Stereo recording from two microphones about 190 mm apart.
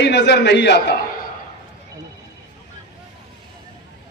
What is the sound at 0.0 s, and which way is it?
Speech, 65° left (ahead or behind).